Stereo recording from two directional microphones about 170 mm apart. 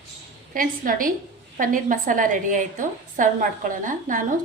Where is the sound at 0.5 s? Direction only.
55° right (ahead or behind).